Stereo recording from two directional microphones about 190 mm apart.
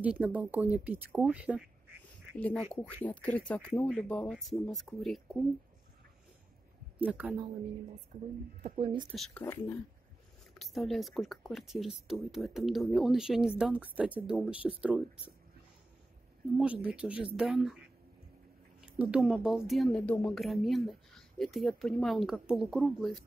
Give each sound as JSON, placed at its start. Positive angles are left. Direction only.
{"t": 0.0, "sound": "speech", "side_deg": -5}
{"t": 3.1, "sound": "speech", "side_deg": 10}
{"t": 7.0, "sound": "speech", "side_deg": -5}
{"t": 8.6, "sound": "speech", "side_deg": -30}
{"t": 9.1, "sound": "speech", "side_deg": 0}
{"t": 9.4, "sound": "speech", "side_deg": 10}
{"t": 10.6, "sound": "speech", "side_deg": 0}
{"t": 16.5, "sound": "speech", "side_deg": -5}
{"t": 18.8, "sound": "speech", "side_deg": -5}